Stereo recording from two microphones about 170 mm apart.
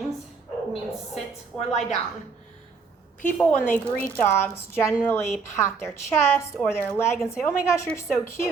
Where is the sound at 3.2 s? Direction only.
10° left (ahead or behind).